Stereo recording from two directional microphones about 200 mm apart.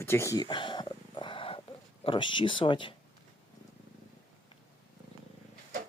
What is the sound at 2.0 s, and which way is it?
Speech, 25° left (ahead or behind).